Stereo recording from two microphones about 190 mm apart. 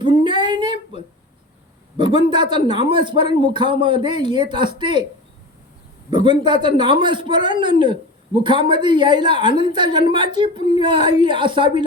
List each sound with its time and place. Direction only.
0.0 s a sound: 25° right (ahead or behind)
2.0 s speech: 25° right (ahead or behind)
6.1 s speech: 25° right (ahead or behind)